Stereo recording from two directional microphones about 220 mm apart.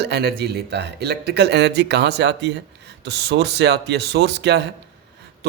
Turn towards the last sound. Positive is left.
turn(degrees=-50)  # may be behind; listen again after turning